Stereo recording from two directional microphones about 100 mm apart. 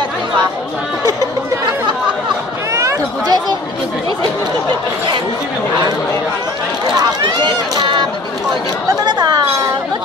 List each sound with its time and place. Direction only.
2.7 s a sound: 35° right (ahead or behind)
7.0 s run: 45° right (ahead or behind)
9.0 s chatter: 40° right (ahead or behind)